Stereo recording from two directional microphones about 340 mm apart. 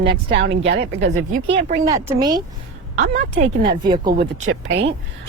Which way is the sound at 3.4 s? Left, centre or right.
Right.